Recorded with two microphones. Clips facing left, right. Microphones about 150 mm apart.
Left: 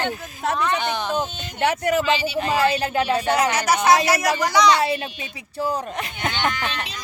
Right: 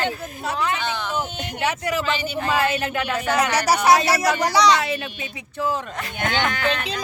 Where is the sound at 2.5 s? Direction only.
35° left (ahead or behind).